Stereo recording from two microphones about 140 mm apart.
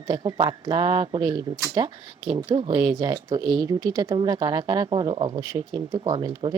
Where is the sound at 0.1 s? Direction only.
30° right (ahead or behind).